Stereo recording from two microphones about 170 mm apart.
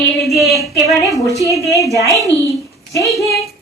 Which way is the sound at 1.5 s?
20° left (ahead or behind).